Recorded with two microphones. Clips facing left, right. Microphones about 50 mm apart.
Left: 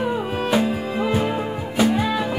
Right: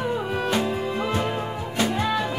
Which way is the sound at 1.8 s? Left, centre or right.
Centre.